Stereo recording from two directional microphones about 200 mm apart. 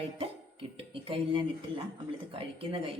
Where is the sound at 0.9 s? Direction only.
25° right (ahead or behind).